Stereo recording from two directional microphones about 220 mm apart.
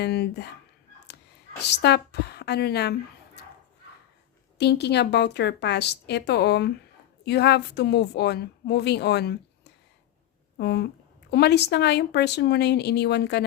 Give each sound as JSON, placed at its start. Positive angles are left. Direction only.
{"t": 0.0, "sound": "a woman's voice", "side_deg": 50}
{"t": 1.8, "sound": "a woman's voice", "side_deg": 50}
{"t": 4.5, "sound": "a woman's voice", "side_deg": 50}